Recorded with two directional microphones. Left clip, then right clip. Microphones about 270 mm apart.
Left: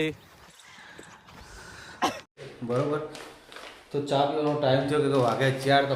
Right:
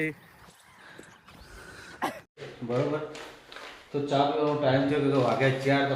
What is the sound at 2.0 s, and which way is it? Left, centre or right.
Cough, left.